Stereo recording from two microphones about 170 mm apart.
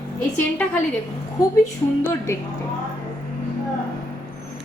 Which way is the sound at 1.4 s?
15° left (ahead or behind).